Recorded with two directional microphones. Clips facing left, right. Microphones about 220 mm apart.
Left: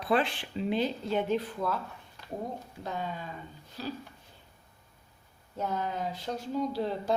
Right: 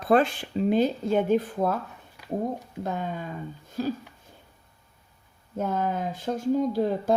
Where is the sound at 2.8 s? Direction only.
50° right (ahead or behind).